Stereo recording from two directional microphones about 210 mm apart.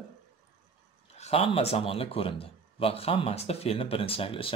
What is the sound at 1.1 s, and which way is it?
Speech, 30° left (ahead or behind).